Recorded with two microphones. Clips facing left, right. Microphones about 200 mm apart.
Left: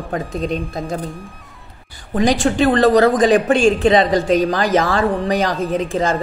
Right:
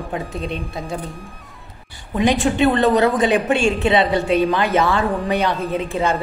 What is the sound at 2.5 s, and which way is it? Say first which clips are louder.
Speech: left 3 dB; 35° left (ahead or behind).